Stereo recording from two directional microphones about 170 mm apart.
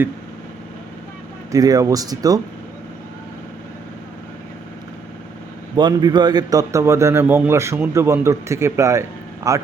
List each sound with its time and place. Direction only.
1.5 s speech: 20° right (ahead or behind)
5.7 s a man's voice: 25° right (ahead or behind)